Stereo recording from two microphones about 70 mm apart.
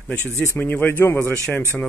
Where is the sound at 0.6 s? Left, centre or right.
Left.